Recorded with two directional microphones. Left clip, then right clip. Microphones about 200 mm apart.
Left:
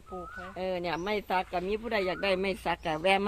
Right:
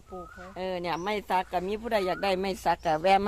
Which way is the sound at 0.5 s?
15° right (ahead or behind).